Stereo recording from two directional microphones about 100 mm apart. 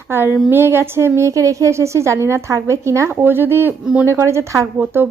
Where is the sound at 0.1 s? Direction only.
20° right (ahead or behind).